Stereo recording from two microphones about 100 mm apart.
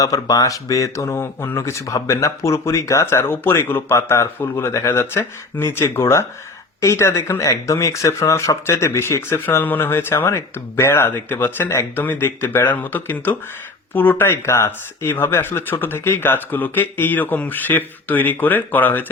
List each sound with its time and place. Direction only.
0.0 s speech: 35° left (ahead or behind); by 19.1 s 20° left (ahead or behind)